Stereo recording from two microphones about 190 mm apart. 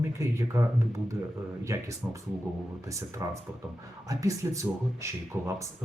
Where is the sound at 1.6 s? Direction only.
15° right (ahead or behind).